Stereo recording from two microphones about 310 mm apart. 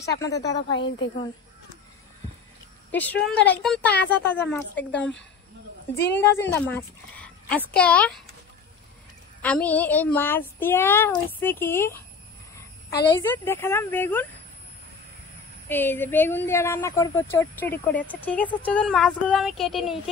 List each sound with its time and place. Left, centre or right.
0.0 s a woman's voice: centre
0.4 s a woman's voice: left
2.9 s a woman's voice: centre
4.8 s a woman's voice: left
6.5 s speech: centre
9.4 s a woman's voice: centre
13.1 s a woman's voice: centre
15.7 s a woman's voice: centre